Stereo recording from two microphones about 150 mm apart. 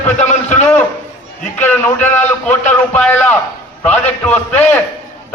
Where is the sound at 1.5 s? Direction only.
10° left (ahead or behind).